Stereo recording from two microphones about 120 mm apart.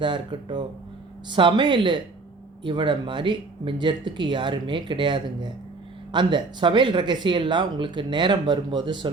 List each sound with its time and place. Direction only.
0.0 s speech: 40° right (ahead or behind)